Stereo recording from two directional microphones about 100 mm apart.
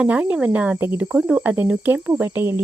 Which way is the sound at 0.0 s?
15° right (ahead or behind).